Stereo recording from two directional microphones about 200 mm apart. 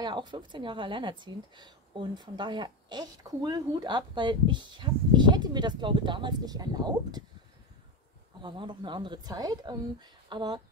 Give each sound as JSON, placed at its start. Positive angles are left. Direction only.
{"t": 0.0, "sound": "speech", "side_deg": -20}
{"t": 8.4, "sound": "speech", "side_deg": -25}